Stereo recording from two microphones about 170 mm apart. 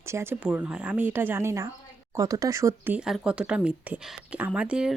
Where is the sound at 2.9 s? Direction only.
5° right (ahead or behind).